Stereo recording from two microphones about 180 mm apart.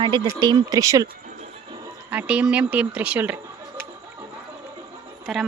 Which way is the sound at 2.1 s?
5° right (ahead or behind).